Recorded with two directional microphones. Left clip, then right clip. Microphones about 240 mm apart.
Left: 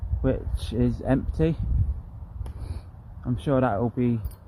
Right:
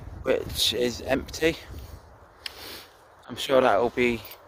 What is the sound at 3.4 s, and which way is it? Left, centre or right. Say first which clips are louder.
Speech: right 4 dB; centre.